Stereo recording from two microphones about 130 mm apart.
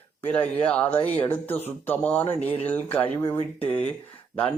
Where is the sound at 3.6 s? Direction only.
10° left (ahead or behind).